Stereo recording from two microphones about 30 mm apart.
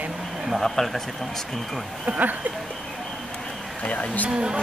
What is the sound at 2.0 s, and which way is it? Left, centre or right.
Speech, right.